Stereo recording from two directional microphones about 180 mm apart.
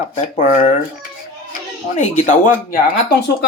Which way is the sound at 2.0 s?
40° left (ahead or behind).